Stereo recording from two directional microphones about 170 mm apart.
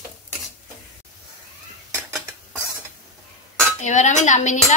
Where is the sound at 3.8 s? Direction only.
45° left (ahead or behind).